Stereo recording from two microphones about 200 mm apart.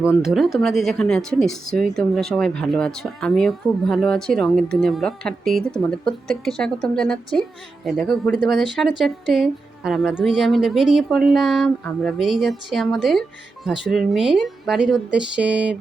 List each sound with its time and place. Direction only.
0.2 s speech: centre (ahead or behind)